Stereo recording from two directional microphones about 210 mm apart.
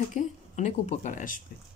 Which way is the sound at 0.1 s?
35° left (ahead or behind).